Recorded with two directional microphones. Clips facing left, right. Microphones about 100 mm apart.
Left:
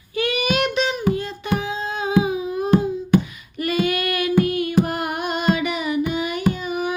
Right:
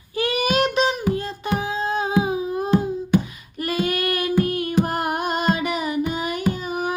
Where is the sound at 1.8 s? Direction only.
35° right (ahead or behind).